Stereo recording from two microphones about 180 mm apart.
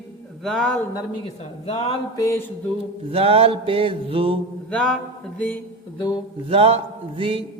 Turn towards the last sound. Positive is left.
turn(degrees=-30)  # may be behind; listen again after turning